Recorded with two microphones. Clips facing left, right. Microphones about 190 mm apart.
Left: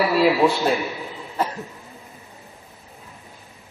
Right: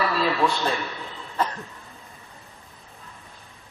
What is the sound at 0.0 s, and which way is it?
Chuckle, 10° left (ahead or behind).